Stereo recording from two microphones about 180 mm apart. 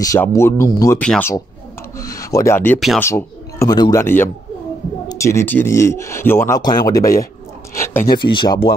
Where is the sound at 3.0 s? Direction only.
15° left (ahead or behind).